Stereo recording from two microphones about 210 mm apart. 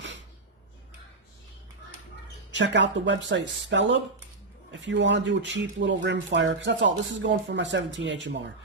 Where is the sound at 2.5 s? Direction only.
60° right (ahead or behind).